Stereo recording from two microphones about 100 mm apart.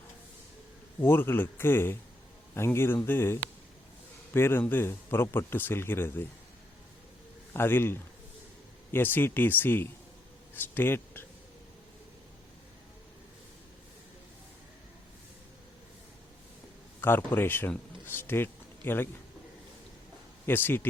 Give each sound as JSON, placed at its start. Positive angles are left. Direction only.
{"t": 1.0, "sound": "speech", "side_deg": 20}
{"t": 7.5, "sound": "speech", "side_deg": 20}
{"t": 17.0, "sound": "a man's voice", "side_deg": 20}
{"t": 20.5, "sound": "speech", "side_deg": 20}